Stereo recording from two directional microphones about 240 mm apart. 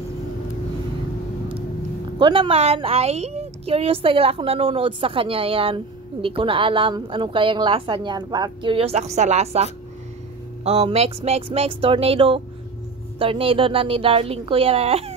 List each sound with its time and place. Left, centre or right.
2.1 s a woman's voice: right